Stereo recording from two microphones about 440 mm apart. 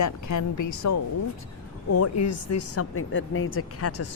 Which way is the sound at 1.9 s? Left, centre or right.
Left.